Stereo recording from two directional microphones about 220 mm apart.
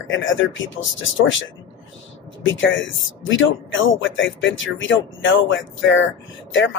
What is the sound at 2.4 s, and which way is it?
A man's voice, 60° left (ahead or behind).